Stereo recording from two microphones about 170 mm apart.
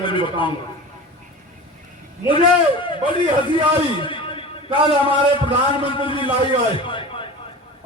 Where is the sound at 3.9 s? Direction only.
30° left (ahead or behind).